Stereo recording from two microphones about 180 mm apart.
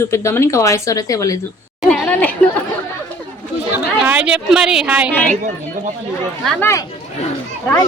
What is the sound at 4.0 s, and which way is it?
A woman's voice, 5° right (ahead or behind).